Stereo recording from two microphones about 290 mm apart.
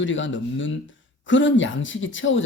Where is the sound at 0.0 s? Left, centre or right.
Left.